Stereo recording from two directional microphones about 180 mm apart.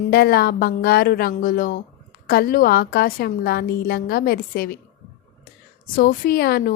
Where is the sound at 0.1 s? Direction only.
60° left (ahead or behind).